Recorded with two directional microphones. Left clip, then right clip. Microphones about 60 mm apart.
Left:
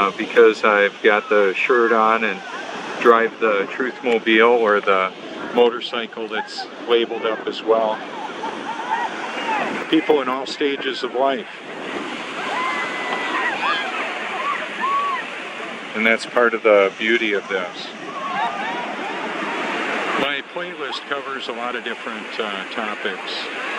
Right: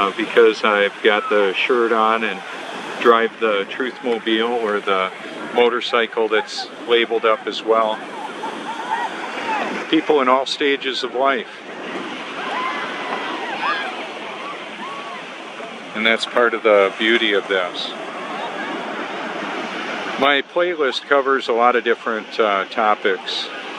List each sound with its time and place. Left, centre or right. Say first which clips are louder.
0.3 s speech: left 1 dB; centre
5.6 s speech: right 2 dB; right
9.4 s boat: even; centre
9.8 s speech: right 3 dB; right
12.4 s waves: left 1 dB; centre
16.0 s speech: right 1 dB; centre
16.8 s speech: right 2 dB; right
19.2 s waves: left 1 dB; centre
19.6 s a sound: left 3 dB; centre
20.2 s speech: right 8 dB; right